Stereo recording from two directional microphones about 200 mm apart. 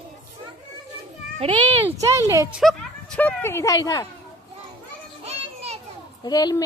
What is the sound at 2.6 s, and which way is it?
Speech, 5° left (ahead or behind).